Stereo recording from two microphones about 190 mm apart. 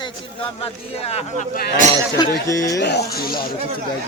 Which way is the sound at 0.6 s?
30° left (ahead or behind).